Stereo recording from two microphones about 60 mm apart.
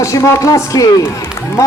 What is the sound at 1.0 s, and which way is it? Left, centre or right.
Run, left.